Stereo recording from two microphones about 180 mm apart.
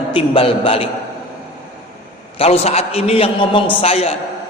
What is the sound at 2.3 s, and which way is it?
A man's voice, 35° left (ahead or behind).